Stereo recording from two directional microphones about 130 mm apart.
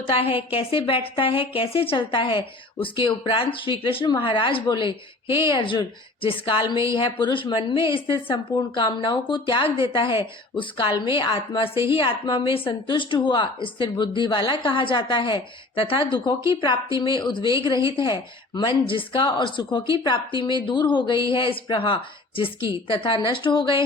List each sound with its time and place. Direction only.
0.1 s a woman's voice: 45° left (ahead or behind)